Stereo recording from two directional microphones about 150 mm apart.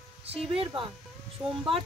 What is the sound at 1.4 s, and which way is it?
Speech, 10° right (ahead or behind).